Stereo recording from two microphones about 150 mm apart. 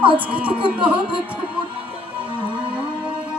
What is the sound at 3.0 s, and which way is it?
Music, 5° right (ahead or behind).